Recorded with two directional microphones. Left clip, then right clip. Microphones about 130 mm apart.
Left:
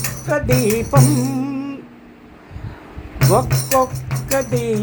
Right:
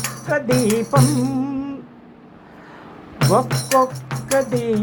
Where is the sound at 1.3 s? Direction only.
30° left (ahead or behind).